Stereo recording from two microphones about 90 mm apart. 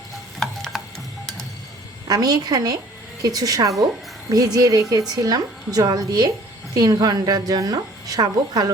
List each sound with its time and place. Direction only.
0.3 s stir: 5° left (ahead or behind)
2.0 s a woman's voice: 45° right (ahead or behind)